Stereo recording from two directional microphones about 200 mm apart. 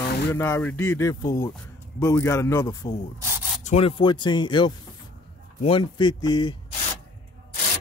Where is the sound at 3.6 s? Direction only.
30° left (ahead or behind).